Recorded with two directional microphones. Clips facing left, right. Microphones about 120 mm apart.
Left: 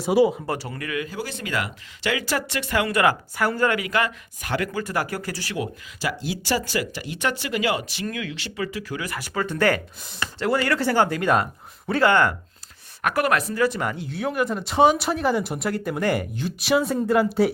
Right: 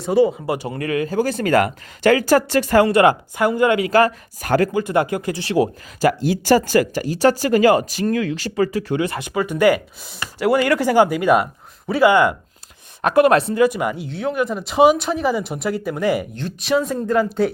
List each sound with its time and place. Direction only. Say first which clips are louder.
0.0 s speech: right 2 dB; 5° left (ahead or behind)
0.4 s speech: right 5 dB; 15° right (ahead or behind)
0.7 s speech: right 8 dB; 35° right (ahead or behind)
2.9 s speech: right 6 dB; 25° right (ahead or behind); by 4.7 s 40° right (ahead or behind)
4.7 s speech: right 8 dB; 20° right (ahead or behind)
6.2 s speech: right 9 dB; 45° right (ahead or behind)
9.0 s speech: right 9 dB; 25° right (ahead or behind)
9.3 s speech: right 5 dB; 15° right (ahead or behind)
13.0 s a woman's voice: right 8 dB; 25° right (ahead or behind); by 17.5 s 5° left (ahead or behind)